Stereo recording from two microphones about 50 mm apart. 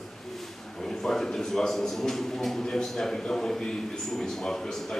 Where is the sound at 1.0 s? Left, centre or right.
Centre.